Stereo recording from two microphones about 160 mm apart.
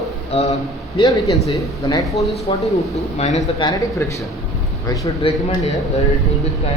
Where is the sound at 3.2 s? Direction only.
45° left (ahead or behind).